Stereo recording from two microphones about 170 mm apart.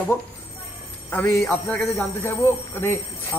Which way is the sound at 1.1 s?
10° left (ahead or behind).